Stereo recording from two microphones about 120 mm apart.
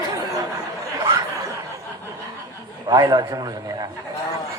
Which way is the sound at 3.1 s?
35° right (ahead or behind).